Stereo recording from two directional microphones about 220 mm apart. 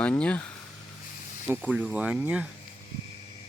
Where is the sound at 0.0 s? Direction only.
5° left (ahead or behind).